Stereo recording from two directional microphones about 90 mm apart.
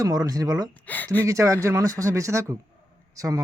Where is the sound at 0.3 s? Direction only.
40° right (ahead or behind).